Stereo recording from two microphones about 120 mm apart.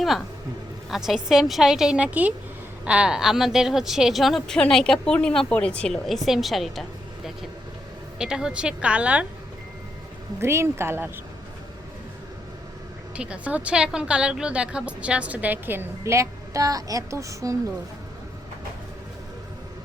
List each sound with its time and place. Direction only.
0.9 s speech: 5° right (ahead or behind)
8.2 s a woman's voice: 5° right (ahead or behind)
10.4 s speech: 20° right (ahead or behind)
13.1 s a woman's voice: 10° right (ahead or behind); by 17.6 s 25° right (ahead or behind)